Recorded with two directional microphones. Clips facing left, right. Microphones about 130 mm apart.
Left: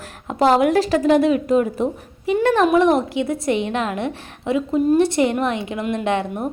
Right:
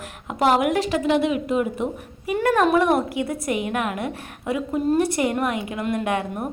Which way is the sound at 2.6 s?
20° left (ahead or behind).